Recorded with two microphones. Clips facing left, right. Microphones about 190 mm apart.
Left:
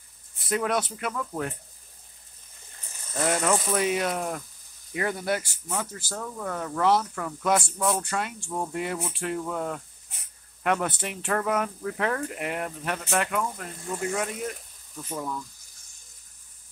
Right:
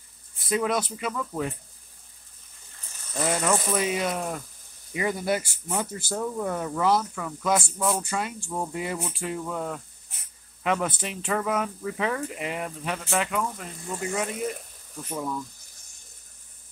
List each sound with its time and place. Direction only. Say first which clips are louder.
0.5 s speech: right 1 dB; centre (ahead or behind)
3.1 s speech: even; centre (ahead or behind)
6.8 s speech: left 1 dB; centre (ahead or behind)